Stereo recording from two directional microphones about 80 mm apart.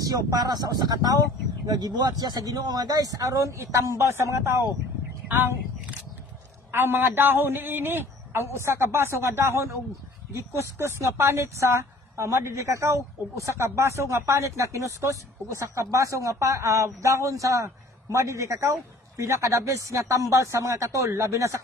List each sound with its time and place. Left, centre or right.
0.0 s a man's voice: right
6.7 s a man's voice: right